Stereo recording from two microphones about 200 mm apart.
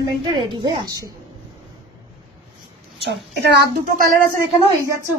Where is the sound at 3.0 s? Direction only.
55° right (ahead or behind).